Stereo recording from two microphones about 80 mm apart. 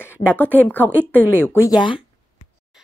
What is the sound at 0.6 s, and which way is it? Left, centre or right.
A woman's voice, left.